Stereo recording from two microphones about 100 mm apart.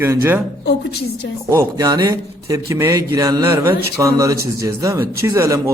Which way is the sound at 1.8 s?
35° right (ahead or behind).